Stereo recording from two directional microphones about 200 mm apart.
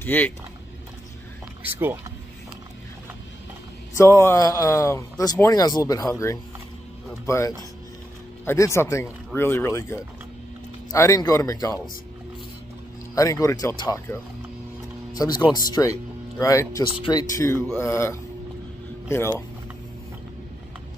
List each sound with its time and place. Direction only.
0.0 s speech: 10° left (ahead or behind)
1.6 s speech: 10° right (ahead or behind)
3.9 s a man's voice: 15° left (ahead or behind)
13.1 s a man's voice: 15° left (ahead or behind)